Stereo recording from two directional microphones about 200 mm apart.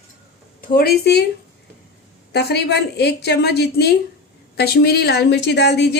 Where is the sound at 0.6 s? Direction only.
50° left (ahead or behind).